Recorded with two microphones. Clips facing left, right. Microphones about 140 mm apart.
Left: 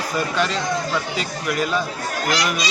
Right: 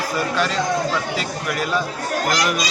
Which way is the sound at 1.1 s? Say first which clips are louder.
Even; centre (ahead or behind).